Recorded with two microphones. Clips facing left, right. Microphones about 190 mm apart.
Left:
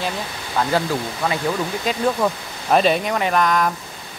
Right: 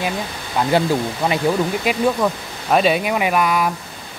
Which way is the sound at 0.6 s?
20° right (ahead or behind).